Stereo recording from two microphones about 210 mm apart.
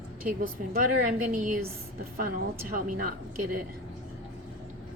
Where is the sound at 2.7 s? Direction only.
45° right (ahead or behind).